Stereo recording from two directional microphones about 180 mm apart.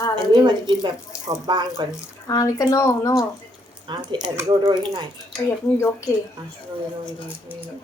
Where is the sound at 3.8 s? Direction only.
25° right (ahead or behind).